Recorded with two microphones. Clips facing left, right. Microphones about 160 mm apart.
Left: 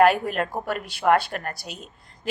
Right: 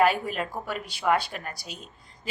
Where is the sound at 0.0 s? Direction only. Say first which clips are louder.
Left 5 dB; 55° left (ahead or behind).